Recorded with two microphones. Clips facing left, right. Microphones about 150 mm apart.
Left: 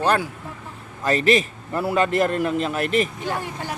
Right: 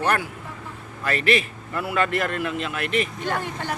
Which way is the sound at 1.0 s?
40° left (ahead or behind).